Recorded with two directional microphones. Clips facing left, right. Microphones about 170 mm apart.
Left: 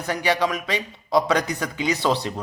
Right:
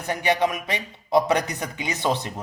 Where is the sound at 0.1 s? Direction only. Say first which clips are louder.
Even; 20° right (ahead or behind).